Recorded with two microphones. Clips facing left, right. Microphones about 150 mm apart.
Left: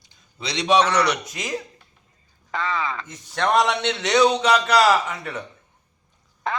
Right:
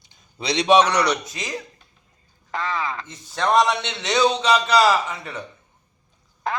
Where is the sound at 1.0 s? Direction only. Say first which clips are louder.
Right 1 dB; 5° left (ahead or behind); by 5.4 s 10° right (ahead or behind).